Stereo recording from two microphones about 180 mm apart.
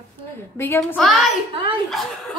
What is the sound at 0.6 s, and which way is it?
Speech, 10° left (ahead or behind).